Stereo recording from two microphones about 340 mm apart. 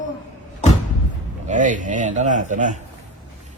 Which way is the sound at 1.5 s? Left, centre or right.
Right.